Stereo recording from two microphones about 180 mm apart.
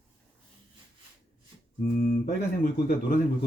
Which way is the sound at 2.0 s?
50° left (ahead or behind).